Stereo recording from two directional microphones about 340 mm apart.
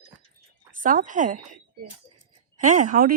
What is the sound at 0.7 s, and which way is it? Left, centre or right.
Speech, right.